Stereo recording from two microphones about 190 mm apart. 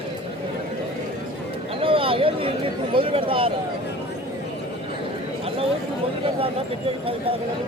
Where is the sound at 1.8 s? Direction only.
30° right (ahead or behind).